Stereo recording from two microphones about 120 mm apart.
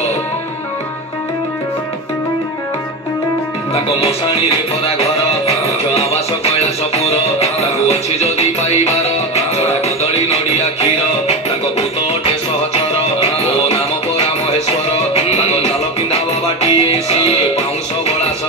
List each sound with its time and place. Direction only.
4.8 s music: 55° left (ahead or behind)
10.5 s music: 60° left (ahead or behind)
12.9 s music: 60° left (ahead or behind)